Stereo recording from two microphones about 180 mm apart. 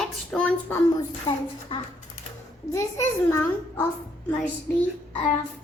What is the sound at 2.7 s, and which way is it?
A child's voice, 15° left (ahead or behind).